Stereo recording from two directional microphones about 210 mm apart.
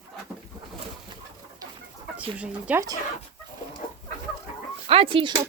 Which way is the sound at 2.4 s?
5° right (ahead or behind).